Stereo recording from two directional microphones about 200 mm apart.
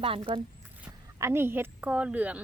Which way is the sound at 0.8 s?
10° right (ahead or behind).